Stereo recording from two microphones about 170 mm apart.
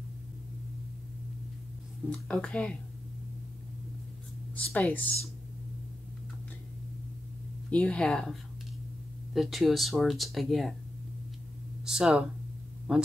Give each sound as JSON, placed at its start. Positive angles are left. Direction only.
{"t": 2.0, "sound": "speech", "side_deg": 5}
{"t": 4.6, "sound": "speech", "side_deg": 10}
{"t": 7.7, "sound": "speech", "side_deg": 5}
{"t": 11.8, "sound": "speech", "side_deg": -5}